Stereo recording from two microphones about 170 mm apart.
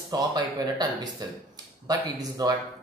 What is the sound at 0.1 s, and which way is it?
A man's voice, 25° right (ahead or behind).